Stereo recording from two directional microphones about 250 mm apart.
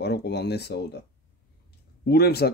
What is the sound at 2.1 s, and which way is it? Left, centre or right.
Speech, left.